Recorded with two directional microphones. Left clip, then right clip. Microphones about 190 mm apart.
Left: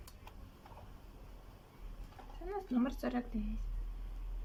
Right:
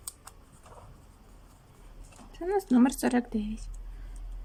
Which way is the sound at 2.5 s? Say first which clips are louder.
Right 12 dB; 60° right (ahead or behind).